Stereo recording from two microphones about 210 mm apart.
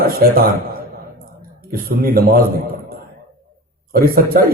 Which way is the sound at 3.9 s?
45° right (ahead or behind).